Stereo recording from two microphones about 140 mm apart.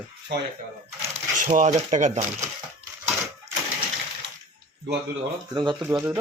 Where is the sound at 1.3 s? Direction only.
70° right (ahead or behind).